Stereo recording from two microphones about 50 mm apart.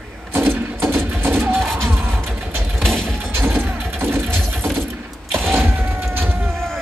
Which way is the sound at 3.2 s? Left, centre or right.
Right.